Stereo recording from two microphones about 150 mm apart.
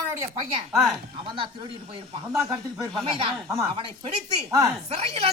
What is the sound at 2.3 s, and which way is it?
Speech, 5° right (ahead or behind).